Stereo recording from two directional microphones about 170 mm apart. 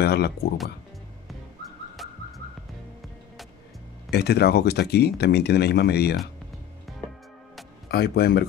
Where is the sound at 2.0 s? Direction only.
Centre (ahead or behind).